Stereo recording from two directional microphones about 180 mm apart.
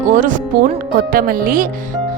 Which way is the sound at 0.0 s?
45° right (ahead or behind).